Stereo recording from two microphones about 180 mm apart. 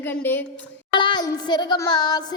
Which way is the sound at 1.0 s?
25° left (ahead or behind).